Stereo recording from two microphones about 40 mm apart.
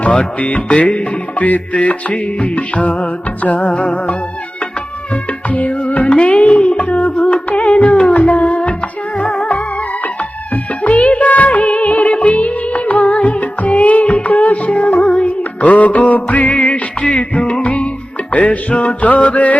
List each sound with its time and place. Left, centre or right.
0.3 s music: left
3.7 s music: left
5.5 s music: left
8.1 s music: left
10.5 s music of bollywood: left
12.2 s music: left
15.6 s music: left